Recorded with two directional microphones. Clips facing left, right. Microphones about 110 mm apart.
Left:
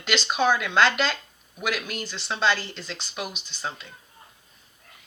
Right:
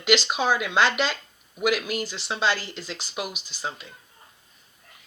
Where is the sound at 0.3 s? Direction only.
10° right (ahead or behind).